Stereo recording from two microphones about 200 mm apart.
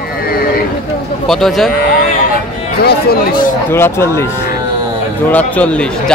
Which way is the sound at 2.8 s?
50° left (ahead or behind).